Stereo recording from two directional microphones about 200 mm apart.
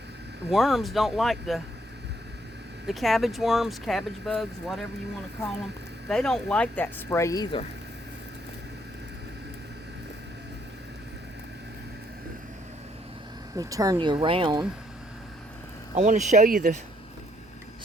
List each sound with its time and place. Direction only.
0.5 s speech: centre (ahead or behind)
2.8 s speech: centre (ahead or behind)
6.1 s speech: 5° left (ahead or behind)
13.6 s speech: 15° right (ahead or behind)
16.0 s speech: 35° right (ahead or behind)